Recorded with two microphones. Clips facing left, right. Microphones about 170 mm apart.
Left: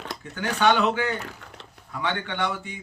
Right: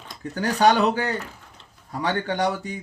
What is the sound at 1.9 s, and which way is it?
Mantra, 40° right (ahead or behind).